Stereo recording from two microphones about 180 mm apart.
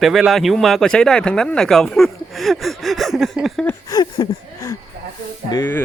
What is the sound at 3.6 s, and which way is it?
Speech, 15° left (ahead or behind).